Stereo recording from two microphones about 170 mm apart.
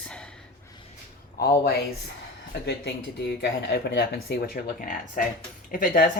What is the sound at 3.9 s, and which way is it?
Speech, 90° left.